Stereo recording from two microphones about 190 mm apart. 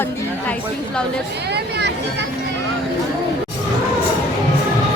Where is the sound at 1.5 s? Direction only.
60° right (ahead or behind).